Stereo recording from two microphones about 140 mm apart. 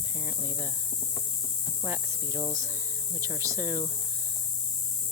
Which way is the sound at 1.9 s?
20° right (ahead or behind).